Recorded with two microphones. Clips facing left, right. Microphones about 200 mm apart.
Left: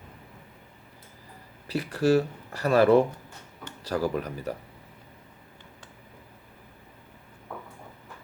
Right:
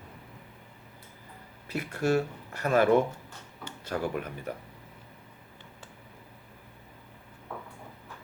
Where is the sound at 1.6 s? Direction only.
35° left (ahead or behind).